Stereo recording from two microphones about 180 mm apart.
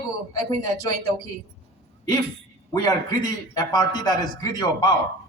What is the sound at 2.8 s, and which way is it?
A woman's voice, 20° left (ahead or behind).